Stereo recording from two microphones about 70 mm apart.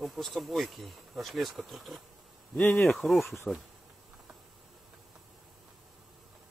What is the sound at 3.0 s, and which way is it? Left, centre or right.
Speech, centre.